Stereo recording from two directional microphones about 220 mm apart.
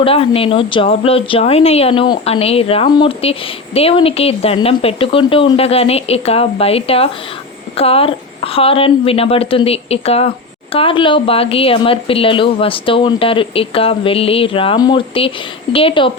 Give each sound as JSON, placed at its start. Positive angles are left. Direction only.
{"t": 0.0, "sound": "speech", "side_deg": 25}